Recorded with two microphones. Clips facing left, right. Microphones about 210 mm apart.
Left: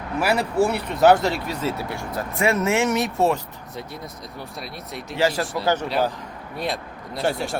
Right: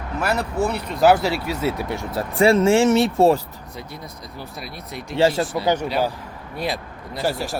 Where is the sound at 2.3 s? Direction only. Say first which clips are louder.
Right 6 dB; 30° right (ahead or behind).